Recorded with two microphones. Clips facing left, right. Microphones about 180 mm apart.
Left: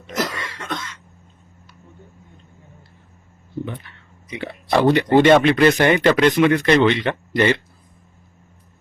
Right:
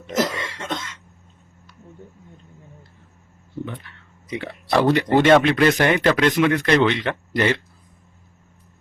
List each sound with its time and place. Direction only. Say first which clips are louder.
0.2 s cough: right 3 dB; 25° right (ahead or behind)
4.4 s speech: left 1 dB; centre (ahead or behind)